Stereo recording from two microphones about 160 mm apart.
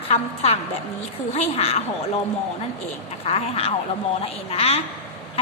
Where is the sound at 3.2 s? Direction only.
35° left (ahead or behind).